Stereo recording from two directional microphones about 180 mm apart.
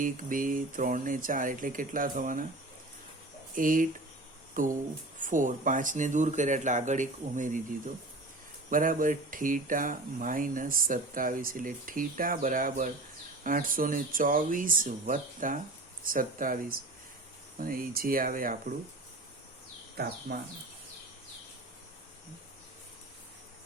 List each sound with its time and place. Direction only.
0.0 s speech: 50° right (ahead or behind)
3.5 s speech: 50° right (ahead or behind)
8.7 s speech: 50° right (ahead or behind)
20.0 s speech: 65° right (ahead or behind)